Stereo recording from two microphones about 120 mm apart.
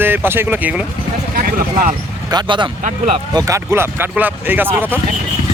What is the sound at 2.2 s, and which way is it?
Speech, 40° right (ahead or behind).